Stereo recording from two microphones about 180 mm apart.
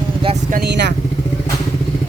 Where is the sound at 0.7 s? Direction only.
70° right (ahead or behind).